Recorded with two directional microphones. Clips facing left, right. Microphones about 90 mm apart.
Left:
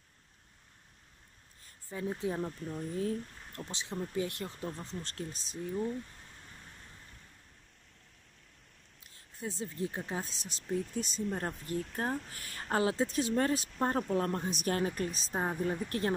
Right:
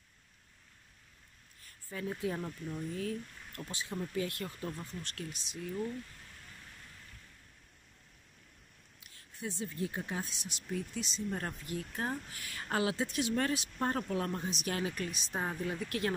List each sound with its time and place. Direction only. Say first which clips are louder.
1.6 s speech: left 2 dB; 25° left (ahead or behind)
9.4 s speech: left 1 dB; 35° left (ahead or behind)